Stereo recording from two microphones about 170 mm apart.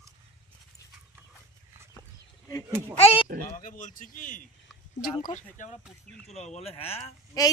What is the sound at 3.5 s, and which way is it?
Speech, 50° left (ahead or behind).